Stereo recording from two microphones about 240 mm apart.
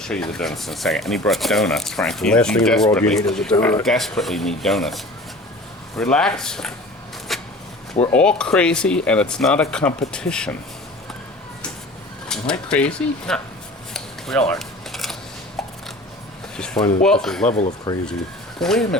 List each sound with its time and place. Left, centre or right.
0.0 s speech: centre
7.3 s a sound: centre
8.1 s speech: centre
12.3 s speech: centre
13.9 s a sound: centre
16.6 s speech: centre
17.9 s speech: centre
18.6 s speech: centre